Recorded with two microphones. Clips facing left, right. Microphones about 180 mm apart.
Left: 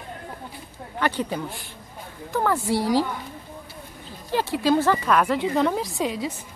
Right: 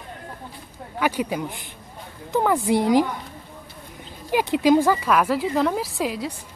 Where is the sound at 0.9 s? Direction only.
10° right (ahead or behind).